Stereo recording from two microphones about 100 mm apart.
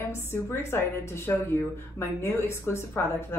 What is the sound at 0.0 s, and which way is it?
A woman's voice, 25° left (ahead or behind).